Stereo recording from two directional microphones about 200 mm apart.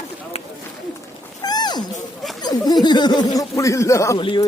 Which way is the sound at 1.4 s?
20° left (ahead or behind).